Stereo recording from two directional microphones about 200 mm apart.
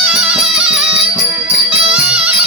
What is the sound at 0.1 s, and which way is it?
Music, 5° right (ahead or behind).